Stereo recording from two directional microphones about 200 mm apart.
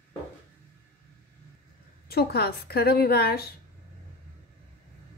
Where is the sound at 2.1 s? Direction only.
50° left (ahead or behind).